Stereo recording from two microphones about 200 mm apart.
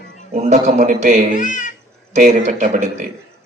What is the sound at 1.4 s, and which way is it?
Speech, 40° left (ahead or behind).